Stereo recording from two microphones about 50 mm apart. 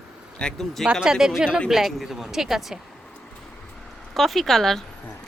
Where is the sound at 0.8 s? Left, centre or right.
Centre.